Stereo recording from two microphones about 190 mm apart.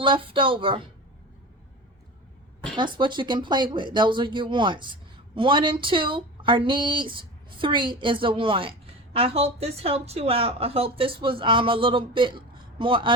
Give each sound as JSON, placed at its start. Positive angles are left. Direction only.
{"t": 0.0, "sound": "a woman's voice", "side_deg": -25}
{"t": 2.7, "sound": "a woman's voice", "side_deg": -25}